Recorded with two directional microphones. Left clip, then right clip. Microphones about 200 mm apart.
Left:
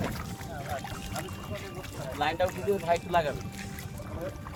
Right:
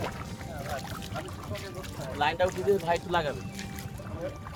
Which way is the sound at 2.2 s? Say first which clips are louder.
Right 2 dB; 30° right (ahead or behind).